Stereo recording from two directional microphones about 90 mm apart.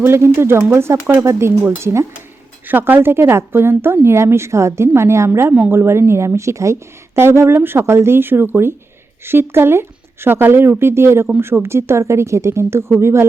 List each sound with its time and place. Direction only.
0.0 s speech: 30° right (ahead or behind)